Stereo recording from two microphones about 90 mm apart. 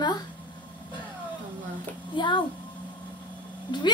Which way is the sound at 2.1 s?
60° left (ahead or behind).